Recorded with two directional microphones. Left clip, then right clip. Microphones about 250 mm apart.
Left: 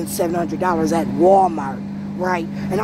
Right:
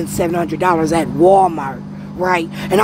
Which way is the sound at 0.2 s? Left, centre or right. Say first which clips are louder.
Right 3 dB; centre.